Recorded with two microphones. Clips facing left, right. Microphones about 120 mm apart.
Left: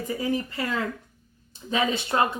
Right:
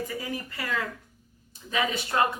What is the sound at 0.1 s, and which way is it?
Speech, 25° left (ahead or behind).